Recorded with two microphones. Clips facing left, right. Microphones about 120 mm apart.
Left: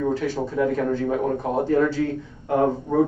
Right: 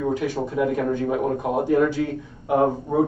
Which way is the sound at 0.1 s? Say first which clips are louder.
Even; 15° right (ahead or behind).